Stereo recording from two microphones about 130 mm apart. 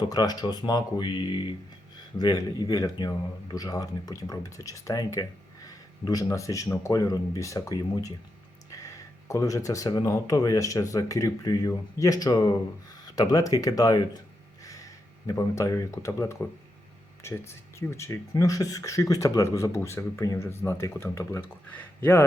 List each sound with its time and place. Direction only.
0.1 s speech: 30° left (ahead or behind)
15.3 s speech: 25° left (ahead or behind)